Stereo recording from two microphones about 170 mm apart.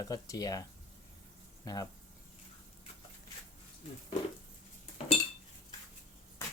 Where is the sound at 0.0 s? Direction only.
20° left (ahead or behind).